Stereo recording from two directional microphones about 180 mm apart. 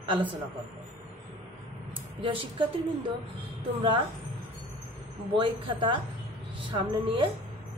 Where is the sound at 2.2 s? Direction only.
30° right (ahead or behind).